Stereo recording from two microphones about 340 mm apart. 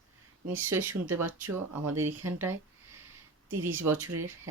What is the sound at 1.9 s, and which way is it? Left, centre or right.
Speech, right.